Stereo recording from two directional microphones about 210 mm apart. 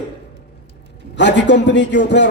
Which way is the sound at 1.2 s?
55° left (ahead or behind).